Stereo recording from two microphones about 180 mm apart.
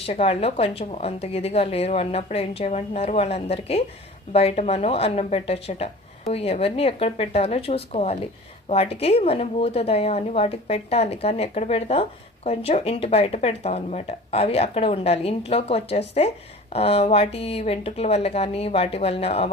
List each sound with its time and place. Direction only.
0.0 s speech: 35° left (ahead or behind)